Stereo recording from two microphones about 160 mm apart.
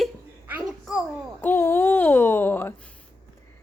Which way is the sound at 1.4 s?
15° left (ahead or behind).